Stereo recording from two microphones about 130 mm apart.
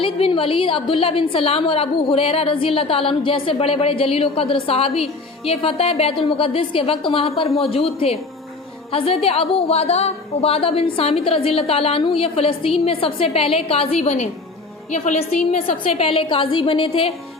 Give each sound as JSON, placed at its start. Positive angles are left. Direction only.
{"t": 0.0, "sound": "a woman's voice", "side_deg": 45}
{"t": 15.6, "sound": "a woman's voice", "side_deg": 50}